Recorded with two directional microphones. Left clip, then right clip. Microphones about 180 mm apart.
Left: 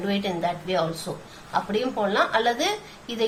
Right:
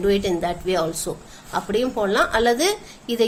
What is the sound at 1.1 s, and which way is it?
Speech, 40° right (ahead or behind).